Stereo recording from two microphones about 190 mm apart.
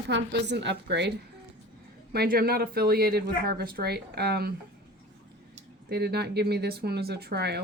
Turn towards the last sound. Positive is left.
turn(degrees=-60)  # may be behind; listen again after turning